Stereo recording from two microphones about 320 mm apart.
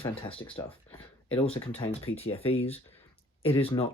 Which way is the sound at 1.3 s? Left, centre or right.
Centre.